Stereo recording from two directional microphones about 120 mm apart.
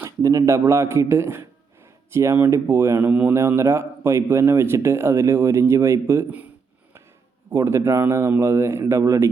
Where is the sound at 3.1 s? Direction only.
10° right (ahead or behind).